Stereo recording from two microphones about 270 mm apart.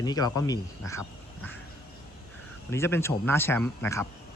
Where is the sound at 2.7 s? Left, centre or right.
Centre.